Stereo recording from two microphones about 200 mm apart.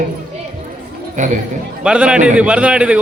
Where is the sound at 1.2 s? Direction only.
40° right (ahead or behind).